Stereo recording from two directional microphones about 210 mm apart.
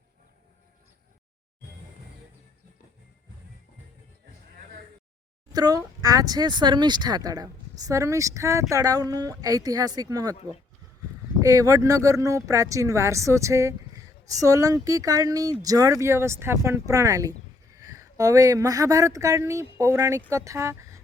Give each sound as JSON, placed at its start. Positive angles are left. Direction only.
{"t": 5.5, "sound": "speech", "side_deg": -15}
{"t": 11.3, "sound": "speech", "side_deg": -15}